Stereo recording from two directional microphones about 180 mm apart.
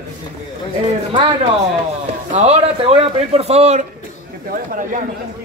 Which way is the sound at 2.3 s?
35° right (ahead or behind).